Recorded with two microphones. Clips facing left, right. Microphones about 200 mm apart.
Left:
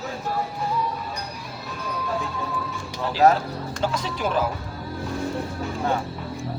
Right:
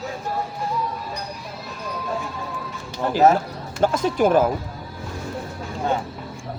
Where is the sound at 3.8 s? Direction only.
50° right (ahead or behind).